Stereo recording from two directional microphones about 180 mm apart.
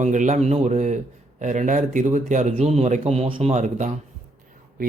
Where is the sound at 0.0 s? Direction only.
45° right (ahead or behind).